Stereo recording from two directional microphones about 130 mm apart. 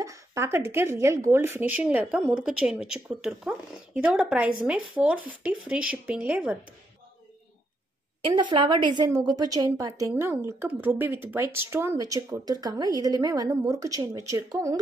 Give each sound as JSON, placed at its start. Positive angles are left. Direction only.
{"t": 0.0, "sound": "speech", "side_deg": -25}
{"t": 8.2, "sound": "a woman's voice", "side_deg": -40}